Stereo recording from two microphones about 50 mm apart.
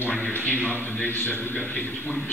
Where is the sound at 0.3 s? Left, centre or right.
Left.